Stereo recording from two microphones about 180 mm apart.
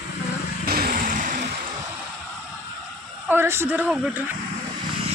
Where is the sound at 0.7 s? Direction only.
55° right (ahead or behind).